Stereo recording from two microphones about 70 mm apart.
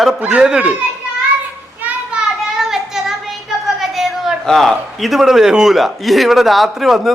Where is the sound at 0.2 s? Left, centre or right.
Centre.